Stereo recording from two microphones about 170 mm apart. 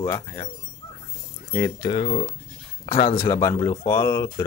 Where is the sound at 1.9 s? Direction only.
30° left (ahead or behind).